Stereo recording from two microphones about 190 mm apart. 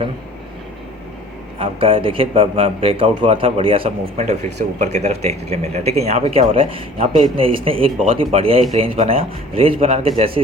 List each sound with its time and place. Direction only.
1.5 s a man's voice: 30° right (ahead or behind)